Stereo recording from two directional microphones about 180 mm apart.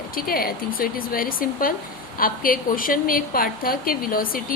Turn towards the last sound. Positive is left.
turn(degrees=50)  # may be behind; listen again after turning